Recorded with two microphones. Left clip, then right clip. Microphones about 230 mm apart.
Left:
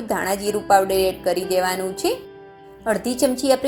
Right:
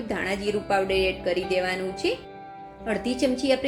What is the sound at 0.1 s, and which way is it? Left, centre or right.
A woman's voice, centre.